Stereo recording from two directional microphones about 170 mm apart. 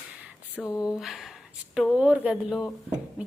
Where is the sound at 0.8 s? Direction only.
Centre (ahead or behind).